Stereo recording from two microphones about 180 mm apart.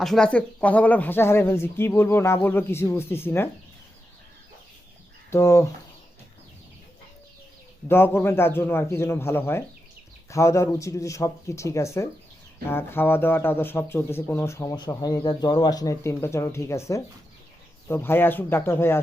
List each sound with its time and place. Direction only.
0.0 s speech: 5° left (ahead or behind)
5.3 s speech: 15° left (ahead or behind)
7.9 s speech: 10° left (ahead or behind)